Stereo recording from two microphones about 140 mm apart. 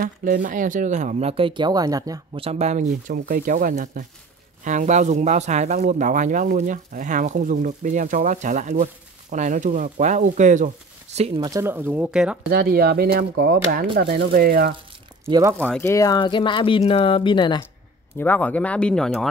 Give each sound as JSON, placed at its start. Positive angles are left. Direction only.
{"t": 0.0, "sound": "speech", "side_deg": -70}
{"t": 1.3, "sound": "speech", "side_deg": -35}
{"t": 2.3, "sound": "speech", "side_deg": -45}
{"t": 4.6, "sound": "speech", "side_deg": -60}
{"t": 11.1, "sound": "speech", "side_deg": -45}
{"t": 11.4, "sound": "speech", "side_deg": -20}
{"t": 12.4, "sound": "speech", "side_deg": -90}
{"t": 15.5, "sound": "speech", "side_deg": 5}
{"t": 15.8, "sound": "speech", "side_deg": 20}
{"t": 16.2, "sound": "speech", "side_deg": 35}
{"t": 18.2, "sound": "speech", "side_deg": 10}